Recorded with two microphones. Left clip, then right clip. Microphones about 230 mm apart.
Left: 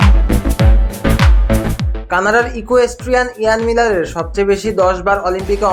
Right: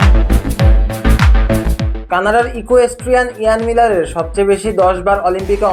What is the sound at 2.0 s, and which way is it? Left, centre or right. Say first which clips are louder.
Speech: even; centre.